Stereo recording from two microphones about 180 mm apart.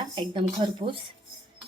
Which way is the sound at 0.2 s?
25° right (ahead or behind).